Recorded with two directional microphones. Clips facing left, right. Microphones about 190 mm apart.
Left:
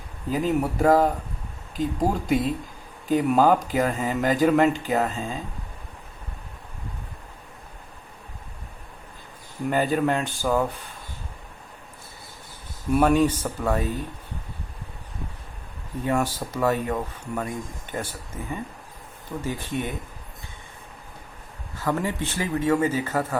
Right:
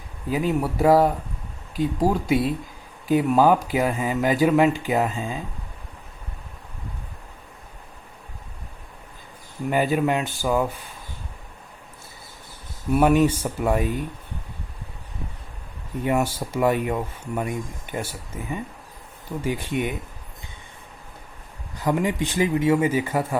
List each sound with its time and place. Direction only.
0.3 s speech: 10° right (ahead or behind)
9.6 s speech: 10° right (ahead or behind)
12.9 s speech: 10° right (ahead or behind)
16.0 s speech: 10° right (ahead or behind)
21.8 s speech: 15° right (ahead or behind)